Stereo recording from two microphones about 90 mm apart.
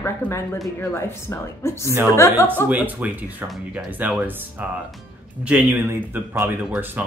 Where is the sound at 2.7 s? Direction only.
20° right (ahead or behind).